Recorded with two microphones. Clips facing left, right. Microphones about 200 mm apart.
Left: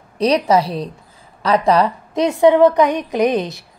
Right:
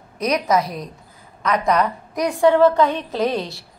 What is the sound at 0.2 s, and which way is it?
A woman's voice, 30° left (ahead or behind).